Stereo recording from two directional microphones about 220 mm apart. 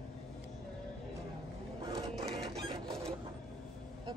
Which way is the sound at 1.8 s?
25° right (ahead or behind).